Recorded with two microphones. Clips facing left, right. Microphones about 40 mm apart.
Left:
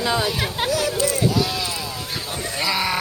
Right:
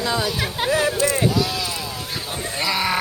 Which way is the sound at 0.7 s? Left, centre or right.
Right.